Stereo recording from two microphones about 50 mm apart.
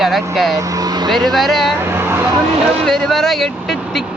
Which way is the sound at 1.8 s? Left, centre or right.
Right.